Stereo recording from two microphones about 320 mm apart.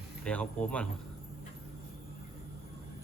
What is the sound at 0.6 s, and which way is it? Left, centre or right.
Speech, centre.